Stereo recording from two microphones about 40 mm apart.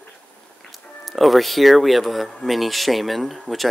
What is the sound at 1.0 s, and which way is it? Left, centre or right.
Speech, centre.